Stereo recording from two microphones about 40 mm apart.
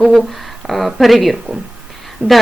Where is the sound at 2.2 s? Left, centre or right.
Right.